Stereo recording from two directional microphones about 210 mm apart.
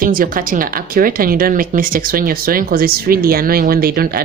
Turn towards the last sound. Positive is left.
turn(degrees=-45)  # may be behind; listen again after turning